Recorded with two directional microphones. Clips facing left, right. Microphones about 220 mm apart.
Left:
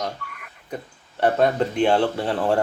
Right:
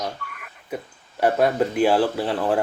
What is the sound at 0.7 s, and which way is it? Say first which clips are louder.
Speech: right 2 dB; 10° right (ahead or behind).